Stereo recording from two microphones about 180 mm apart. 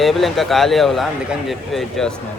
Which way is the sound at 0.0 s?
Centre (ahead or behind).